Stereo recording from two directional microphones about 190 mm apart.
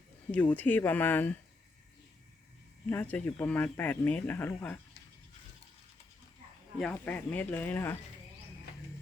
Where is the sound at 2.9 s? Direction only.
10° left (ahead or behind).